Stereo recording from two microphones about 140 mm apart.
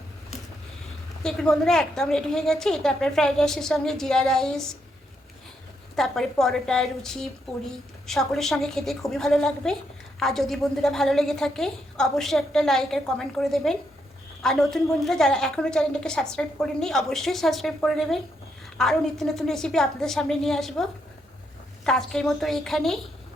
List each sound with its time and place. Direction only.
1.2 s a woman's voice: 5° left (ahead or behind)
6.0 s a woman's voice: centre (ahead or behind)
21.8 s a woman's voice: 5° left (ahead or behind)